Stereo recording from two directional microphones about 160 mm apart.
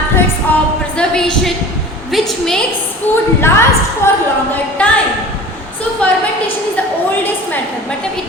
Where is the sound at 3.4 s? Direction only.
15° left (ahead or behind).